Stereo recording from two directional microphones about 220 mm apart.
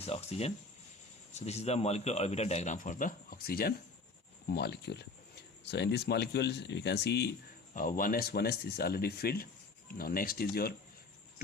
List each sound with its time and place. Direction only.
0.0 s speech: 30° left (ahead or behind); by 7.3 s 50° left (ahead or behind)
7.7 s speech: 40° left (ahead or behind)